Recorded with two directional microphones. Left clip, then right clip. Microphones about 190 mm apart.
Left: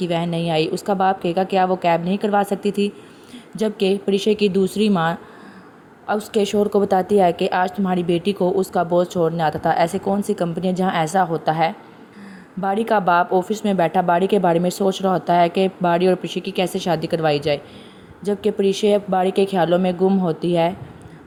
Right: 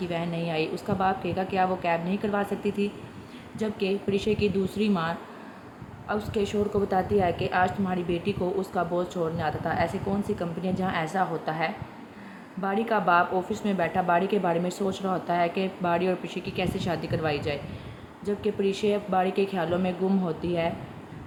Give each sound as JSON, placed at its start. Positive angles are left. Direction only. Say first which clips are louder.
{"t": 0.0, "sound": "a woman's voice", "louder": "left 8 dB", "side_deg": 40}